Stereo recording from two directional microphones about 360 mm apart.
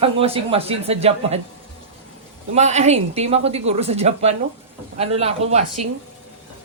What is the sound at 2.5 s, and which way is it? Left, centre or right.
A woman's voice, centre.